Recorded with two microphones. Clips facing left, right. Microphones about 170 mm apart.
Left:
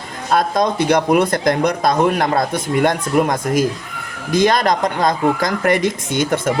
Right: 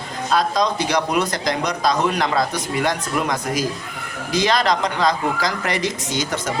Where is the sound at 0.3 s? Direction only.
55° left (ahead or behind).